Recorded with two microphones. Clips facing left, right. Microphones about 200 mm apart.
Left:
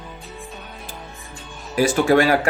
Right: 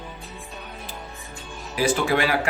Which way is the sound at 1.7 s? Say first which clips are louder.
Left 6 dB; 45° left (ahead or behind).